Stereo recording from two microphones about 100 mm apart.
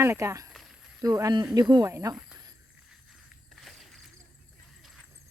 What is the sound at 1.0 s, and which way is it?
Speech, 40° right (ahead or behind).